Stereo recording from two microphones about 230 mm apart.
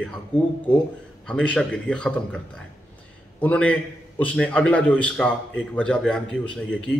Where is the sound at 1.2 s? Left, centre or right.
Centre.